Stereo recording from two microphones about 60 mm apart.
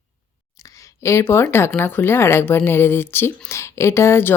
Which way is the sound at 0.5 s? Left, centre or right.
Left.